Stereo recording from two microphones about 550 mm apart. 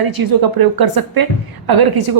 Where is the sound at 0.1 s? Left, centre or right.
Right.